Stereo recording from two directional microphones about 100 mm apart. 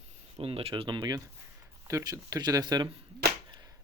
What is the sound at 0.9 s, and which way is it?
Speech, 45° right (ahead or behind).